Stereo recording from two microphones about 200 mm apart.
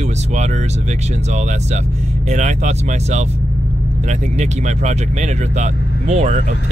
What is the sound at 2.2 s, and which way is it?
Speech, 35° right (ahead or behind).